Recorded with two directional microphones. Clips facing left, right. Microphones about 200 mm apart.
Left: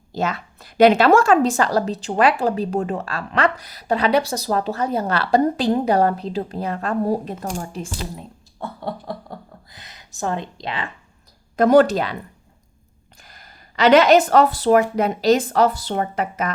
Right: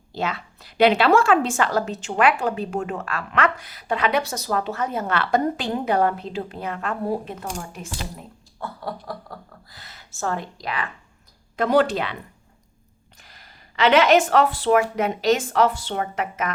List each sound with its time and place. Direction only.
0.1 s a woman's voice: 45° left (ahead or behind)
8.6 s speech: 25° left (ahead or behind)
11.5 s a woman's voice: 45° left (ahead or behind)
13.2 s a woman's voice: 45° left (ahead or behind)